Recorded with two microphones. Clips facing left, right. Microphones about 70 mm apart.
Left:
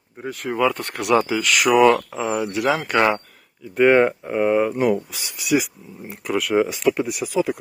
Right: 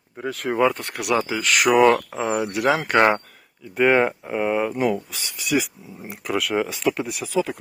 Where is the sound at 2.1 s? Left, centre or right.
Right.